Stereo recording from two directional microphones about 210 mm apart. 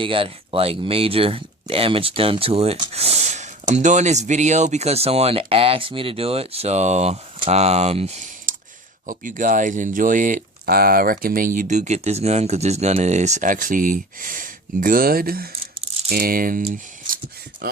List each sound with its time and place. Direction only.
0.0 s speech: 25° right (ahead or behind); by 15.4 s 45° right (ahead or behind)
16.0 s typing: 45° right (ahead or behind)
16.6 s a sound: 40° right (ahead or behind)